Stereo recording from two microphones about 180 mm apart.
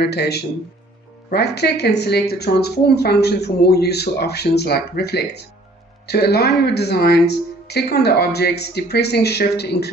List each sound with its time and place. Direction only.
0.0 s speech: 65° left (ahead or behind)